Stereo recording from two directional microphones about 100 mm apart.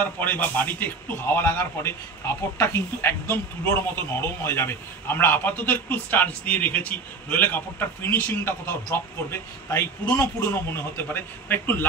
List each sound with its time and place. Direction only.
0.0 s a man's voice: 15° left (ahead or behind)